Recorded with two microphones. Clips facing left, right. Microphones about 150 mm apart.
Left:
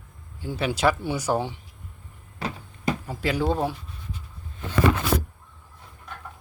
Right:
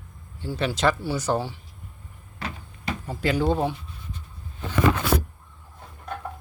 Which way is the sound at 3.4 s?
Centre (ahead or behind).